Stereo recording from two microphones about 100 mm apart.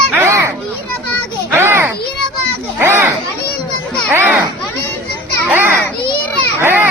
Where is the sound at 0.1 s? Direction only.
25° right (ahead or behind).